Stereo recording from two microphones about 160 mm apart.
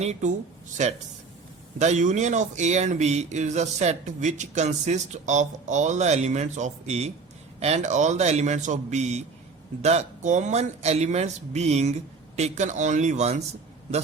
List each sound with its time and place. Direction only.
0.0 s speech: 45° right (ahead or behind)